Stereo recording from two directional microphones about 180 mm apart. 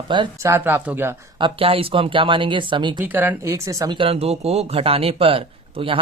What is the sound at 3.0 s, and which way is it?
Speech, 10° right (ahead or behind).